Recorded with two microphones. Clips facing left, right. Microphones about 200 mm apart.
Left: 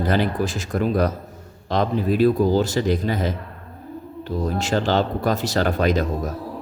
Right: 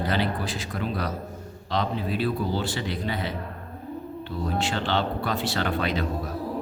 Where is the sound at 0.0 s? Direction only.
45° left (ahead or behind).